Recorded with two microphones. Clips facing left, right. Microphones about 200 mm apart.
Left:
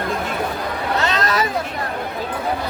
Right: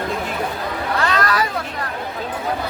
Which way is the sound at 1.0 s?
20° left (ahead or behind).